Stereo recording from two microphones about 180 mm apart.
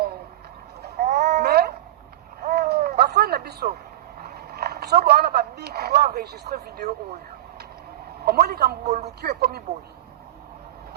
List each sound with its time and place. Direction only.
0.8 s a sound: 65° right (ahead or behind)
4.2 s speech: 60° right (ahead or behind)
8.2 s a man's voice: 60° right (ahead or behind)
8.8 s speech: 40° right (ahead or behind)
9.2 s a man's voice: 60° right (ahead or behind)